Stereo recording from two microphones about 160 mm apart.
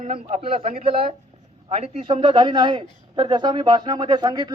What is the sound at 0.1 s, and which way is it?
A man's voice, 40° right (ahead or behind).